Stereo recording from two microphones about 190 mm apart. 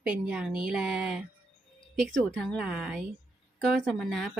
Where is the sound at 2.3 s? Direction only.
5° left (ahead or behind).